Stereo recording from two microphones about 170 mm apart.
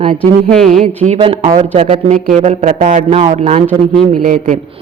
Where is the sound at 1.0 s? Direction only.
35° right (ahead or behind).